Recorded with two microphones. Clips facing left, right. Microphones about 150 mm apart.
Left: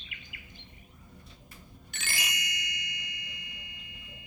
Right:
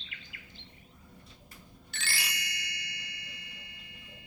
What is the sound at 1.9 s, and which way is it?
Ding, 15° left (ahead or behind).